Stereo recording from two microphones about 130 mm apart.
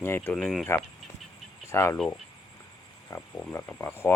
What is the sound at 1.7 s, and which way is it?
Speech, 20° left (ahead or behind).